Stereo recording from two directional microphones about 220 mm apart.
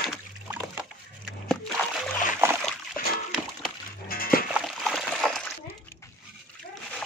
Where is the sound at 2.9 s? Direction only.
40° left (ahead or behind).